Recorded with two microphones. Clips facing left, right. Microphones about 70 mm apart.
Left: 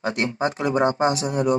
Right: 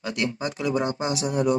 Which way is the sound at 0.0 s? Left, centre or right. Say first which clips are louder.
Left 4 dB; left.